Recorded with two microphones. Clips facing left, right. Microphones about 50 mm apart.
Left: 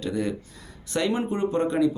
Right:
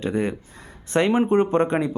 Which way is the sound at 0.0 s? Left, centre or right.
Right.